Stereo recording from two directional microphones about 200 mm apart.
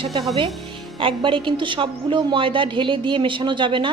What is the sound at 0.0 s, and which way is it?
A woman's voice, 30° right (ahead or behind).